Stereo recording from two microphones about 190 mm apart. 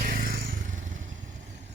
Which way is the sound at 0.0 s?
50° right (ahead or behind).